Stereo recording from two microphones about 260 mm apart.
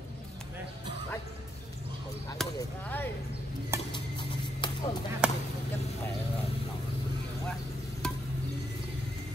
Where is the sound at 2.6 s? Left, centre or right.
Centre.